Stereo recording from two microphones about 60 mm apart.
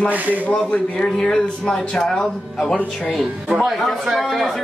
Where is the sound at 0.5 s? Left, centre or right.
Centre.